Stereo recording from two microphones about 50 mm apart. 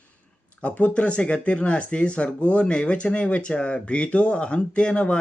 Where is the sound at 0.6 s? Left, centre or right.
Left.